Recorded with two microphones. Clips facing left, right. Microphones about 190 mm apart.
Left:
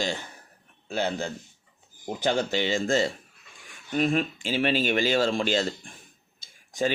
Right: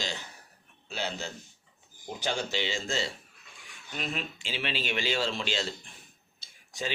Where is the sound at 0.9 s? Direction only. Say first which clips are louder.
Left 7 dB; 55° left (ahead or behind).